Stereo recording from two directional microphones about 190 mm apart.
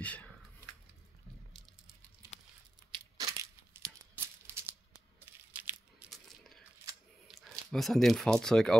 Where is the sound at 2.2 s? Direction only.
15° right (ahead or behind); by 6.3 s centre (ahead or behind).